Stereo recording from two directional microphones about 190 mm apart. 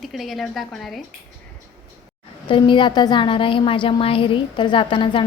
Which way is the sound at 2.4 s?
25° left (ahead or behind).